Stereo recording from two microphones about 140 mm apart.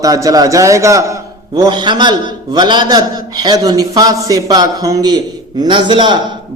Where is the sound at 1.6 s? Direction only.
30° right (ahead or behind).